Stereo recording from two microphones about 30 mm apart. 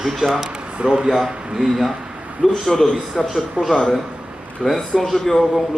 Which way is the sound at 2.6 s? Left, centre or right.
Centre.